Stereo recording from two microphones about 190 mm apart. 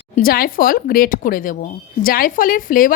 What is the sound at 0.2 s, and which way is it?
A woman's voice, 50° left (ahead or behind).